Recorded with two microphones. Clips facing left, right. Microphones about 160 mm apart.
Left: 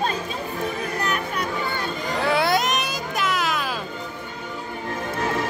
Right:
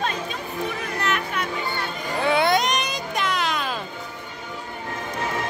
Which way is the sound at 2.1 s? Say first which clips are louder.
Right 1 dB; centre (ahead or behind).